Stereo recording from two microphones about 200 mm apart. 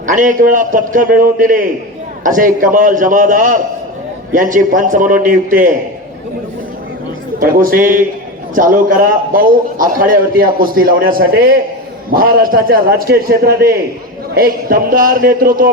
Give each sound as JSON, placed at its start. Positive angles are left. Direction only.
{"t": 0.0, "sound": "a man's voice", "side_deg": -40}
{"t": 7.3, "sound": "a man's voice", "side_deg": -45}